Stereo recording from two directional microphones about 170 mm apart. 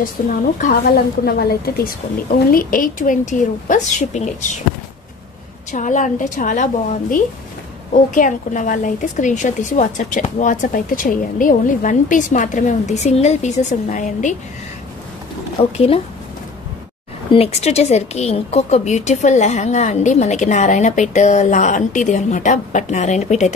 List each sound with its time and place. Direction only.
0.2 s a woman's voice: 50° left (ahead or behind)
2.5 s a woman's voice: 55° left (ahead or behind)
5.7 s a woman's voice: 45° left (ahead or behind)
17.3 s a woman's voice: 35° left (ahead or behind)